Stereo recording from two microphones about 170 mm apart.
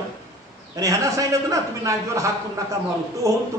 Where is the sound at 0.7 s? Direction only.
20° right (ahead or behind).